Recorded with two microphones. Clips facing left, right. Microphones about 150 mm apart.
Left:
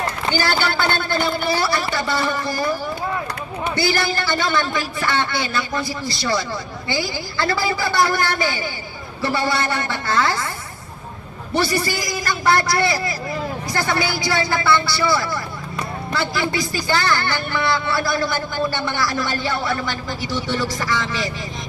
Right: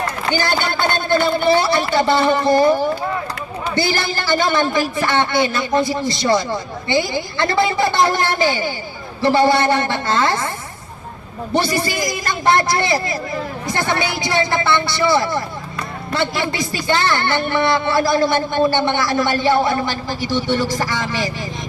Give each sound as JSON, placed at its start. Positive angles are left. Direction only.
{"t": 0.7, "sound": "a woman's voice", "side_deg": -20}
{"t": 3.8, "sound": "a woman's voice", "side_deg": -25}
{"t": 11.5, "sound": "a woman's voice", "side_deg": -25}